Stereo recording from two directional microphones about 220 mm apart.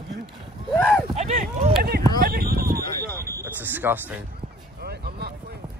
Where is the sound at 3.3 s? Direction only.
10° right (ahead or behind).